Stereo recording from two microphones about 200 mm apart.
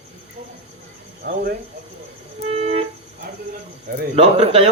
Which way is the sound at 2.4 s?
30° right (ahead or behind).